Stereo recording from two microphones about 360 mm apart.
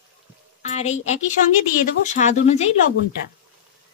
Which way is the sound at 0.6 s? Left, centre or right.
Centre.